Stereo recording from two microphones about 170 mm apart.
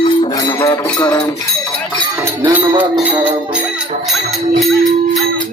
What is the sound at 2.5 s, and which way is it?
Music, 10° right (ahead or behind).